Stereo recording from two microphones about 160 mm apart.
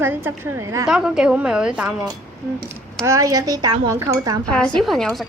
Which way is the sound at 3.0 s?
20° right (ahead or behind).